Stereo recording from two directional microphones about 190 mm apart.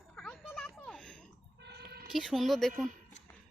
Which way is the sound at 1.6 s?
60° right (ahead or behind).